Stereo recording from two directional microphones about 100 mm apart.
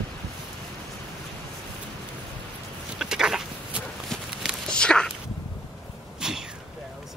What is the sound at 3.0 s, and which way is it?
Walk, 5° right (ahead or behind).